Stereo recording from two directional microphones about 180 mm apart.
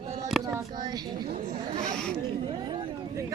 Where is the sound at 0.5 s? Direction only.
20° right (ahead or behind).